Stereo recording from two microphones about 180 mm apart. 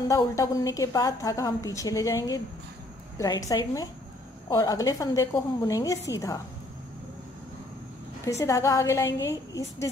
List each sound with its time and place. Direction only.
0.1 s a woman's voice: 20° left (ahead or behind)
8.3 s a woman's voice: 15° left (ahead or behind)